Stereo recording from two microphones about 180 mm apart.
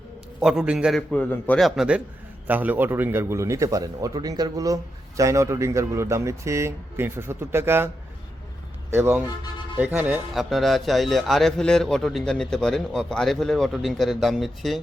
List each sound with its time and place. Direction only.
0.3 s a man's voice: 5° right (ahead or behind)
1.1 s a man's voice: 10° left (ahead or behind); by 7.9 s 15° right (ahead or behind)
8.9 s a man's voice: 15° right (ahead or behind)
10.3 s a man's voice: centre (ahead or behind)